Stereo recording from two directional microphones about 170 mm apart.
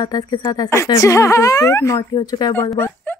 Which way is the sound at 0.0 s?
25° left (ahead or behind).